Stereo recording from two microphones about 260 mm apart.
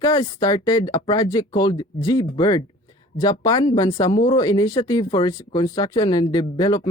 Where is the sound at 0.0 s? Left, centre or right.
Centre.